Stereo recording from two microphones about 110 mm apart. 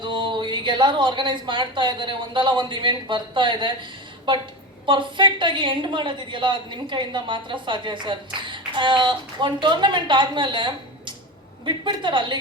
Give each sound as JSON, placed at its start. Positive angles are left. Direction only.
{"t": 0.0, "sound": "a woman's voice", "side_deg": -45}